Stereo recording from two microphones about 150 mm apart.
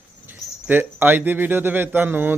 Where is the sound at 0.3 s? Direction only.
15° right (ahead or behind).